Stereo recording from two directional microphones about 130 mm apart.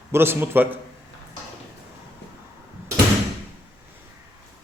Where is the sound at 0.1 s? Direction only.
20° right (ahead or behind).